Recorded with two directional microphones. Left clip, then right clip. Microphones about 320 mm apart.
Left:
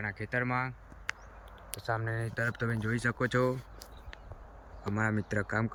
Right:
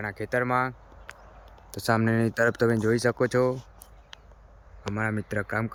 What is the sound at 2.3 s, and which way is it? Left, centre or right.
Speech, centre.